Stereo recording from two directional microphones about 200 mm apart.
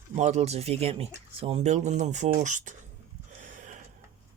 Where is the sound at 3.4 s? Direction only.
40° right (ahead or behind).